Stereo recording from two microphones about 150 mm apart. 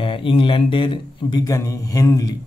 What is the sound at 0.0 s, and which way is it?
Speech, 35° left (ahead or behind).